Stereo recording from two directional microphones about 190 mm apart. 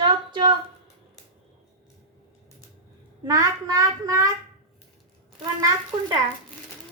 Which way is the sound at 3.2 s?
20° right (ahead or behind).